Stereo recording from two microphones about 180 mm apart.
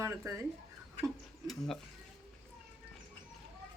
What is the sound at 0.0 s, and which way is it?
Speech, 15° right (ahead or behind).